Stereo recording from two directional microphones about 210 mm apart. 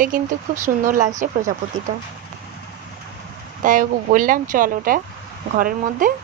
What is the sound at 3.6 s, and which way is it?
Speech, 40° right (ahead or behind).